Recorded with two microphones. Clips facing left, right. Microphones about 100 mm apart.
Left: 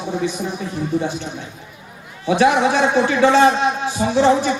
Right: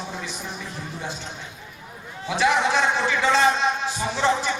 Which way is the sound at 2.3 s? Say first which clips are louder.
Left 6 dB; 55° left (ahead or behind).